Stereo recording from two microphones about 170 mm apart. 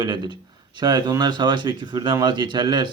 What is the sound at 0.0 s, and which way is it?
Speech, 25° right (ahead or behind).